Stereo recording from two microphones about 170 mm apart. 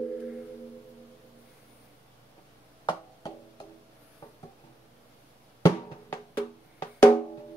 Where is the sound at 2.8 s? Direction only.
25° left (ahead or behind).